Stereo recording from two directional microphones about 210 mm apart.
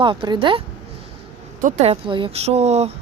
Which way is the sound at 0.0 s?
25° right (ahead or behind).